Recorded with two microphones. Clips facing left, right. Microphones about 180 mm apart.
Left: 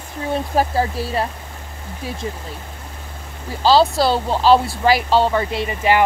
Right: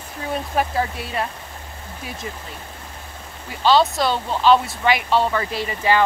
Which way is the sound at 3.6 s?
30° left (ahead or behind).